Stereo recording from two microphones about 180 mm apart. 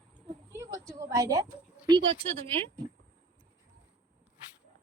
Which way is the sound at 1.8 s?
25° right (ahead or behind).